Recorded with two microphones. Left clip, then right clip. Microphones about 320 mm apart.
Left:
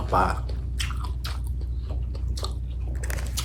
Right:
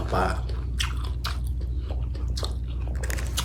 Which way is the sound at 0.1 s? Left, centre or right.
Centre.